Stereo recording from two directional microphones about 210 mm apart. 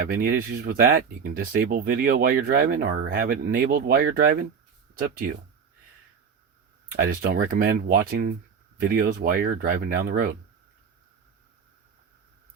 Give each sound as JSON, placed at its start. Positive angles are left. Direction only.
{"t": 0.1, "sound": "speech", "side_deg": -40}
{"t": 6.8, "sound": "speech", "side_deg": -40}